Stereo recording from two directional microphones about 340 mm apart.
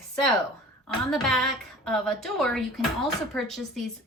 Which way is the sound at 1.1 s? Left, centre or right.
Centre.